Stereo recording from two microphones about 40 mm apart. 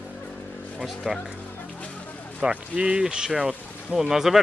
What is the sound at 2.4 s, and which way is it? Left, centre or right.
Speech, right.